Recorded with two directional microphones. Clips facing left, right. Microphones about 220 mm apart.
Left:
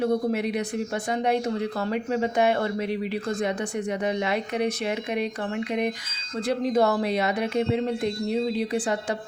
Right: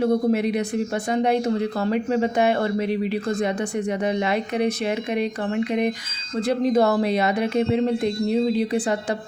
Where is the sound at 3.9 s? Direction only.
30° right (ahead or behind).